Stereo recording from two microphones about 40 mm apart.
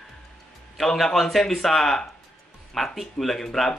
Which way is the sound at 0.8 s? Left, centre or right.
Centre.